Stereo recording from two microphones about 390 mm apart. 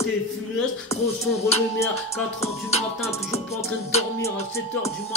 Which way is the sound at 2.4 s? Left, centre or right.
Centre.